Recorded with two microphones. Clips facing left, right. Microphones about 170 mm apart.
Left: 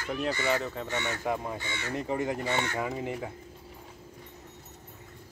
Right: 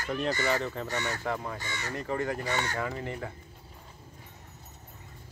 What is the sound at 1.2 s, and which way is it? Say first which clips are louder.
Speech: left 2 dB; 15° left (ahead or behind).